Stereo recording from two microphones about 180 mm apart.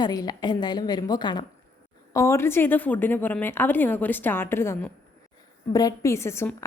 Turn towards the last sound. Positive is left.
turn(degrees=15)  # may be behind; listen again after turning